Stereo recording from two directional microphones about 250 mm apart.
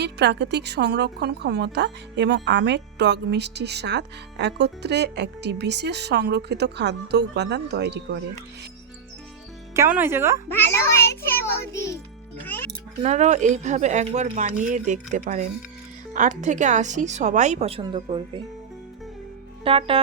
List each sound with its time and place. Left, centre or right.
0.0 s a woman's voice: right
9.7 s speech: centre
10.5 s a child's voice: centre
13.0 s speech: right
19.6 s speech: right